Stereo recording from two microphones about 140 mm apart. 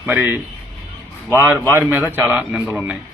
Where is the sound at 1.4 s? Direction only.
15° right (ahead or behind).